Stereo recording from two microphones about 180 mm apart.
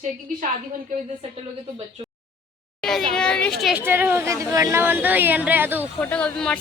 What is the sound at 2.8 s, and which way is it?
A child's voice, 5° left (ahead or behind).